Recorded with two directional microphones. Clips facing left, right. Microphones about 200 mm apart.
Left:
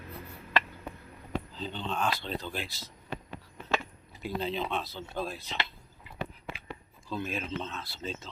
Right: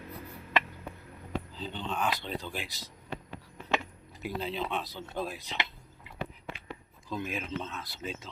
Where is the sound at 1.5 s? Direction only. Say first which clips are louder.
Left 1 dB; 10° right (ahead or behind).